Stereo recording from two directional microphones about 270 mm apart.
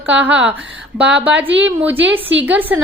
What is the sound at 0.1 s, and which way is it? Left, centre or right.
A woman's voice, centre.